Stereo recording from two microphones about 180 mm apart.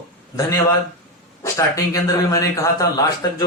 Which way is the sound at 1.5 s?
15° left (ahead or behind).